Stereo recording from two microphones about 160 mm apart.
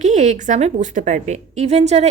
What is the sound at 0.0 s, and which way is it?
Speech, 45° right (ahead or behind).